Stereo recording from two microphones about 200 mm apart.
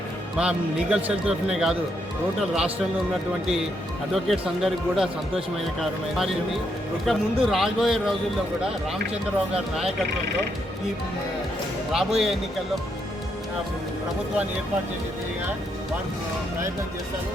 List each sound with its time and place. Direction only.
0.3 s a man's voice: 5° right (ahead or behind)
11.9 s a man's voice: centre (ahead or behind)